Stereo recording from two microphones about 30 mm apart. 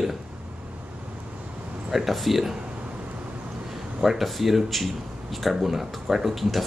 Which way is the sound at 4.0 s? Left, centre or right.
Centre.